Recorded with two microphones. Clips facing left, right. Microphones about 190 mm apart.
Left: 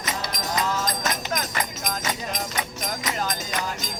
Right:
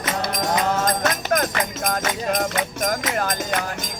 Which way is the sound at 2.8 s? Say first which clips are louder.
Right 6 dB; 55° right (ahead or behind).